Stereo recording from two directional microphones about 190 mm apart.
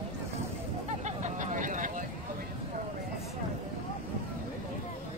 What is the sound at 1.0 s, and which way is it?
Vehicle, 40° right (ahead or behind).